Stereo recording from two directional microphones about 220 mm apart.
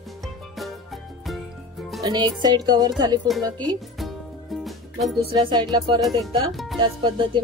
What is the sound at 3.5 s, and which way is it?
Music, 5° left (ahead or behind).